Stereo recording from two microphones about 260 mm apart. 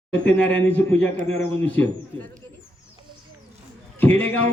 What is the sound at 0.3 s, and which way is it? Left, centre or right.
Speech, centre.